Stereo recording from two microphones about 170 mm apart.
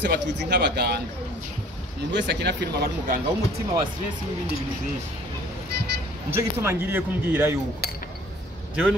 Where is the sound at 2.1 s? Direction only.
90° right.